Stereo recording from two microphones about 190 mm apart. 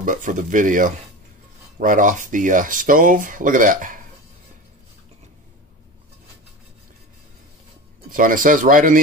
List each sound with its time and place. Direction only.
0.0 s speech: 40° right (ahead or behind)
8.1 s speech: 45° right (ahead or behind)